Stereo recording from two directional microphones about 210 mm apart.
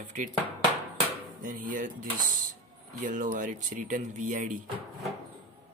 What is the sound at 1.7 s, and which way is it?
Speech, 40° right (ahead or behind).